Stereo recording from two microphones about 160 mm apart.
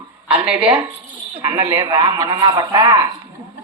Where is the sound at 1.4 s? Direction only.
30° right (ahead or behind).